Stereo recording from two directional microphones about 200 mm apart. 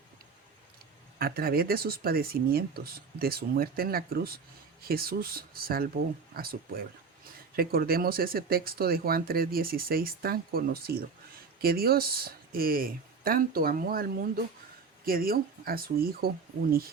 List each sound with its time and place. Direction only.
1.2 s speech: 50° right (ahead or behind)